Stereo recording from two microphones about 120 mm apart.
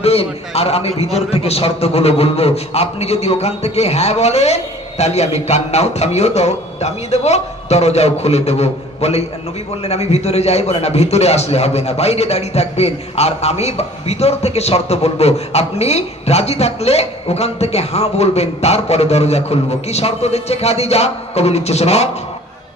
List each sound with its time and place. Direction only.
0.0 s a man's voice: 55° left (ahead or behind)